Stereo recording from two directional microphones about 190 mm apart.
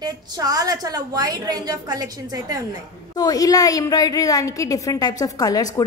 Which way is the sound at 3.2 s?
20° left (ahead or behind).